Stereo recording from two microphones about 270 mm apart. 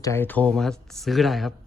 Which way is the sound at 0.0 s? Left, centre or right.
Centre.